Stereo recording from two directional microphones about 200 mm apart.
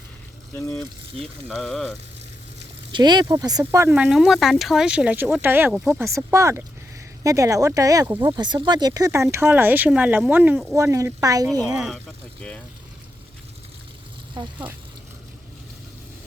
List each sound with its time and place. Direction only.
1.2 s speech: centre (ahead or behind)
2.9 s speech: 20° right (ahead or behind); by 6.1 s 5° right (ahead or behind)
6.1 s speech: 15° right (ahead or behind)
11.6 s speech: centre (ahead or behind)
14.4 s speech: 20° right (ahead or behind)